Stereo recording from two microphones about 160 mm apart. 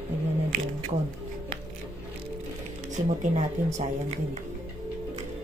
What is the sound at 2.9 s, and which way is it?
Speech, 50° right (ahead or behind).